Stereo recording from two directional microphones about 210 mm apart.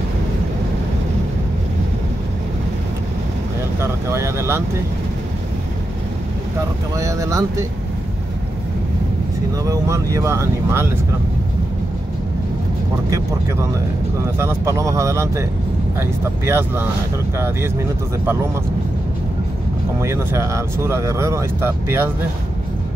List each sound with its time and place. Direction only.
3.8 s speech: 15° right (ahead or behind)
7.0 s speech: 15° right (ahead or behind)
9.7 s speech: 15° right (ahead or behind)
14.4 s speech: 15° right (ahead or behind)
20.0 s speech: 15° right (ahead or behind)